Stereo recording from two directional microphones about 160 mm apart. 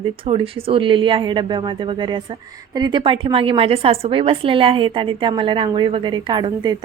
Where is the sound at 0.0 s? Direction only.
35° right (ahead or behind).